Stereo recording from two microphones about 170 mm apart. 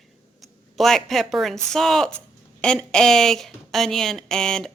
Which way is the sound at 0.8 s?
Centre (ahead or behind).